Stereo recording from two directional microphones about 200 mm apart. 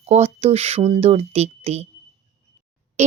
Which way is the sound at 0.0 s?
30° right (ahead or behind).